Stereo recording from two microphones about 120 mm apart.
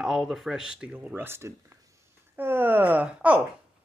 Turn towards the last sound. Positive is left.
turn(degrees=-10)  # may be behind; listen again after turning